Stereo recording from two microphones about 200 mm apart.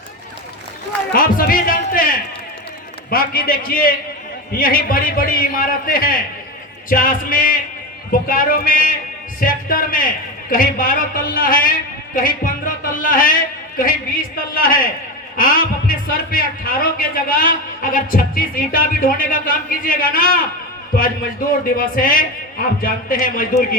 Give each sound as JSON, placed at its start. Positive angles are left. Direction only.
{"t": 1.1, "sound": "music", "side_deg": 45}
{"t": 3.1, "sound": "a man's voice", "side_deg": 45}
{"t": 21.8, "sound": "a man's voice", "side_deg": 45}